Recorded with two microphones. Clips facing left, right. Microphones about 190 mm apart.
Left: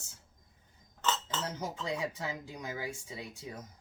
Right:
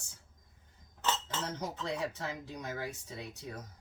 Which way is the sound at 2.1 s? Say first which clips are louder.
Left 1 dB; 10° left (ahead or behind).